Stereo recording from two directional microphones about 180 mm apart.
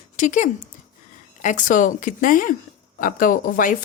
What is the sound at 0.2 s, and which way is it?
Speech, 45° left (ahead or behind).